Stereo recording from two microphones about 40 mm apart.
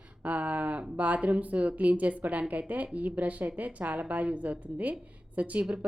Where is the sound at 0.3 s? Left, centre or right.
Right.